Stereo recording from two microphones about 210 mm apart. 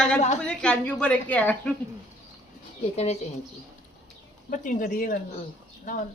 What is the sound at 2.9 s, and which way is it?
Speech, 30° left (ahead or behind).